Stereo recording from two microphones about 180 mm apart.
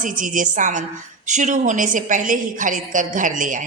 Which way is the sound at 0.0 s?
45° right (ahead or behind).